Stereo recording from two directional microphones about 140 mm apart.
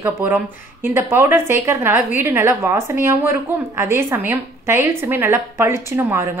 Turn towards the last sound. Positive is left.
turn(degrees=-20)  # may be behind; listen again after turning